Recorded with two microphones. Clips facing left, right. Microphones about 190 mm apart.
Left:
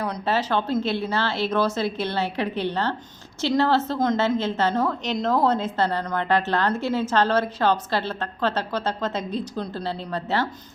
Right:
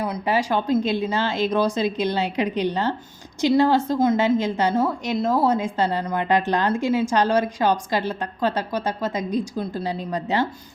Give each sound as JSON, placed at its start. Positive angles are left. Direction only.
{"t": 0.0, "sound": "a woman's voice", "side_deg": -10}